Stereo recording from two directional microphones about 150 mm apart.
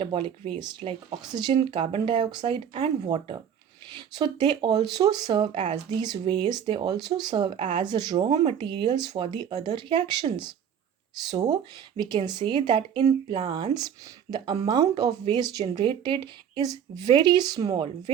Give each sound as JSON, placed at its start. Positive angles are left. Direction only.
{"t": 0.0, "sound": "speech", "side_deg": -35}
{"t": 2.7, "sound": "speech", "side_deg": -45}
{"t": 3.1, "sound": "speech", "side_deg": -30}
{"t": 11.3, "sound": "speech", "side_deg": -25}